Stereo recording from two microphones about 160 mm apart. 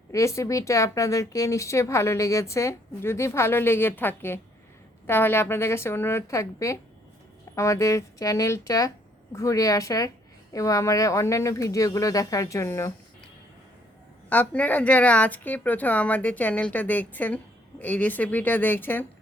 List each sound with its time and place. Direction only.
0.1 s a woman's voice: 20° left (ahead or behind)
14.3 s speech: 10° left (ahead or behind)